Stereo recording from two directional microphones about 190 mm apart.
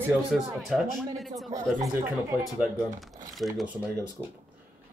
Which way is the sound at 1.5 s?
15° right (ahead or behind).